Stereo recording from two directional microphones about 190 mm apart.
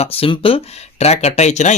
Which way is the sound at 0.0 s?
30° left (ahead or behind).